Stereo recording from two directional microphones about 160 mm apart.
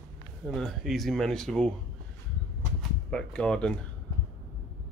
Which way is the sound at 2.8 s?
5° left (ahead or behind).